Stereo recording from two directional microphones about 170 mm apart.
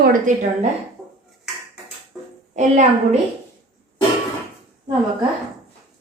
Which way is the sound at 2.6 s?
50° right (ahead or behind).